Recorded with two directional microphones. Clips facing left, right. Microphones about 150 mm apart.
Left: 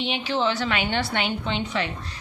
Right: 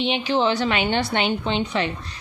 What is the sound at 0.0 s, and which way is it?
A woman's voice, 20° right (ahead or behind).